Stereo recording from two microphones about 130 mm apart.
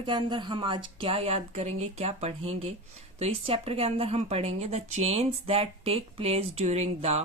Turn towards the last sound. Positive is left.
turn(degrees=-55)  # may be behind; listen again after turning